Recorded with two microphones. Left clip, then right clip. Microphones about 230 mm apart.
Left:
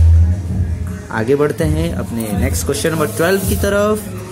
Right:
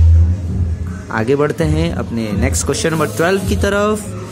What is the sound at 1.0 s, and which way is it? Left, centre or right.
Speech, centre.